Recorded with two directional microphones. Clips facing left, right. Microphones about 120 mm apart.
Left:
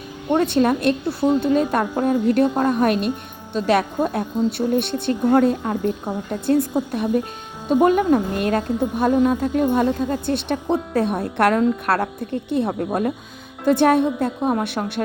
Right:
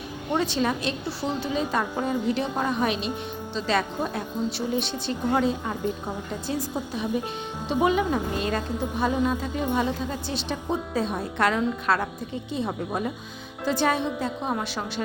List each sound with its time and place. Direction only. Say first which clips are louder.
0.3 s a woman's voice: left 7 dB; 55° left (ahead or behind)